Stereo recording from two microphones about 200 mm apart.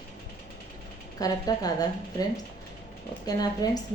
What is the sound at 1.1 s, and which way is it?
Speech, 20° left (ahead or behind).